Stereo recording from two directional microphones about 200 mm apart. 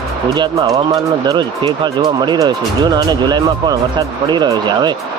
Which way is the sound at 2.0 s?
20° right (ahead or behind).